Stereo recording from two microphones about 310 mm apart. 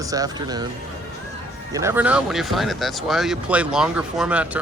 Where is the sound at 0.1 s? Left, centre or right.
Centre.